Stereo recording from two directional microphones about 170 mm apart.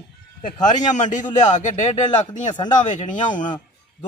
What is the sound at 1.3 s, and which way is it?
Speech, 45° left (ahead or behind).